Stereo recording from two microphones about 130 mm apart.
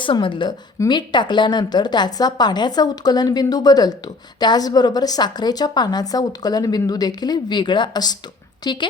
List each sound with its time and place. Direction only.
0.0 s a woman's voice: 40° left (ahead or behind)